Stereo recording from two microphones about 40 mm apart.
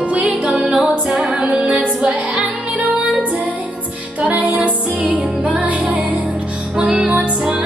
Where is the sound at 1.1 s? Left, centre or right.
Centre.